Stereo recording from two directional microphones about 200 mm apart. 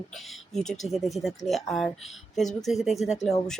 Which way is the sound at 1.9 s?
30° left (ahead or behind).